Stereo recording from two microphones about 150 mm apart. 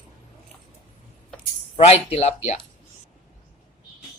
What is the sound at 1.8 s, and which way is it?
Speech, 40° left (ahead or behind).